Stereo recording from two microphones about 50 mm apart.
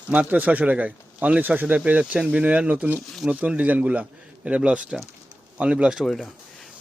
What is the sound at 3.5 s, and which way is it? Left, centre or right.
A man's voice, right.